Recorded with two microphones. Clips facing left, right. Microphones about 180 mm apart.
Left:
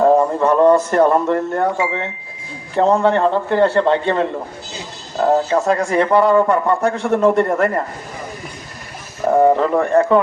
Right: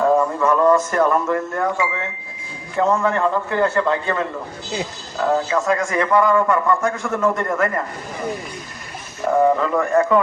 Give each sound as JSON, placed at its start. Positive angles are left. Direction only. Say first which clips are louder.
{"t": 0.0, "sound": "a man's voice", "louder": "left 4 dB", "side_deg": 35}
{"t": 9.3, "sound": "a man's voice", "louder": "left 3 dB", "side_deg": 35}